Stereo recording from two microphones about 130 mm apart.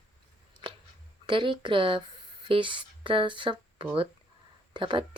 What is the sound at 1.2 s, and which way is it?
Speech, 40° right (ahead or behind).